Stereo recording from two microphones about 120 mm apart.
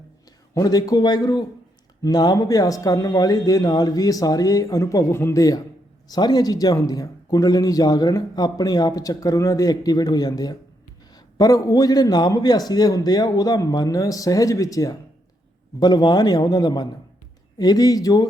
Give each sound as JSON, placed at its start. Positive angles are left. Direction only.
{"t": 0.5, "sound": "speech", "side_deg": 30}